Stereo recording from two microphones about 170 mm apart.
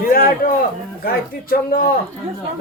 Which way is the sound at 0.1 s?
60° left (ahead or behind).